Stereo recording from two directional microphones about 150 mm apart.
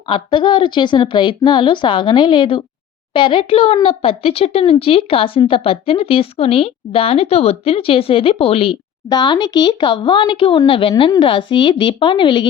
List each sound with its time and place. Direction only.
0.1 s speech: 30° left (ahead or behind)